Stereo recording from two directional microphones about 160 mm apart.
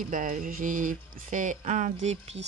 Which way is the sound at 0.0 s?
55° right (ahead or behind).